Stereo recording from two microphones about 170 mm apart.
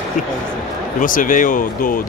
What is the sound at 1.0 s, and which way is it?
Speech, 55° left (ahead or behind).